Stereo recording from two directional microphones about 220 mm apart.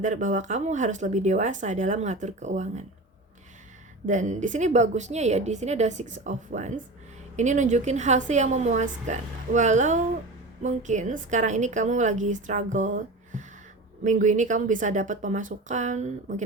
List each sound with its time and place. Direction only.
0.0 s speech: 35° right (ahead or behind)
4.0 s speech: 35° right (ahead or behind)